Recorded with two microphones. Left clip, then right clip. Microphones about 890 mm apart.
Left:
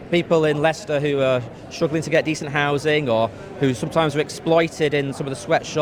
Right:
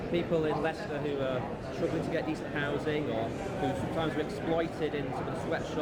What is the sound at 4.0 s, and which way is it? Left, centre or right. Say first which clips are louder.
A man's voice: left 12 dB; left.